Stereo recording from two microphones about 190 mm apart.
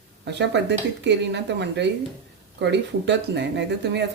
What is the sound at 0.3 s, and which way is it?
A woman's voice, 65° right (ahead or behind).